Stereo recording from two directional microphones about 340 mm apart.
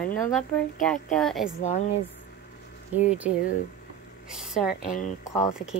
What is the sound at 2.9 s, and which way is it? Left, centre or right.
Speech, centre.